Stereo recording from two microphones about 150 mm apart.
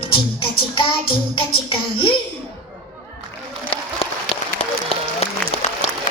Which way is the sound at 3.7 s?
40° left (ahead or behind).